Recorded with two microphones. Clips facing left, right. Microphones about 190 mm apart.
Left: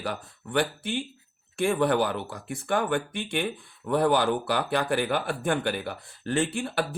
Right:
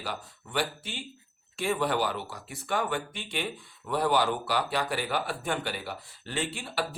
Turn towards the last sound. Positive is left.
turn(degrees=50)  # may be behind; listen again after turning